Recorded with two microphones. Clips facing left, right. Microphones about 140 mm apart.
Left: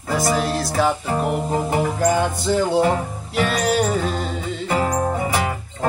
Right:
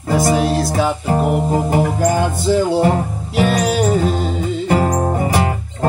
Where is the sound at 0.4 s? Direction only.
Centre (ahead or behind).